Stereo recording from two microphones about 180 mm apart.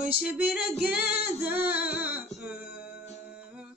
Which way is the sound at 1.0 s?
60° left (ahead or behind).